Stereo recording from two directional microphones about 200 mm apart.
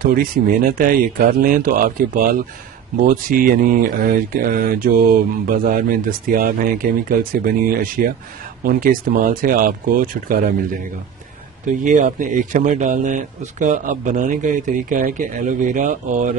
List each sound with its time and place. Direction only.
0.0 s a man's voice: 45° right (ahead or behind)